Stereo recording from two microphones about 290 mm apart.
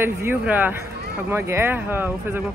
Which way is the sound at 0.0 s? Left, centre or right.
Centre.